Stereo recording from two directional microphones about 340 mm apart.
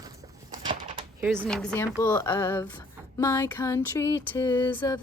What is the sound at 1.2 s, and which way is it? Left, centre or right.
A woman's voice, centre.